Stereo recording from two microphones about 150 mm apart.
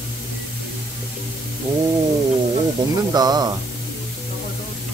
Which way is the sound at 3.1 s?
25° right (ahead or behind).